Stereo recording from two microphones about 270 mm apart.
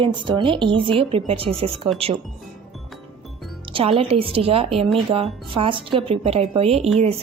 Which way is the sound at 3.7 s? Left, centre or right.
Right.